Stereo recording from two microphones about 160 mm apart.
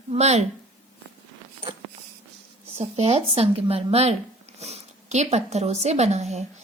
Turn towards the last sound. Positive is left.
turn(degrees=-45)  # may be behind; listen again after turning